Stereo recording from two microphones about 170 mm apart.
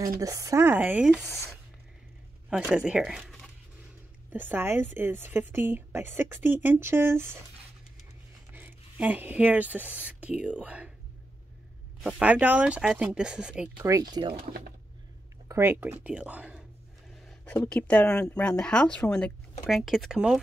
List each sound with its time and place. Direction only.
0.2 s a woman's voice: 20° right (ahead or behind)
2.5 s speech: 5° right (ahead or behind)
4.3 s a woman's voice: 10° right (ahead or behind)
8.5 s speech: 10° right (ahead or behind)
12.0 s a woman's voice: 5° right (ahead or behind)
14.1 s speech: 30° right (ahead or behind)
15.4 s speech: 15° right (ahead or behind)
17.2 s a sound: centre (ahead or behind)
17.6 s speech: 5° left (ahead or behind)